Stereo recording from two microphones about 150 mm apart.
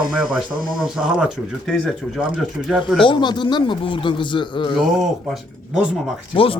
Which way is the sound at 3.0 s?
30° left (ahead or behind).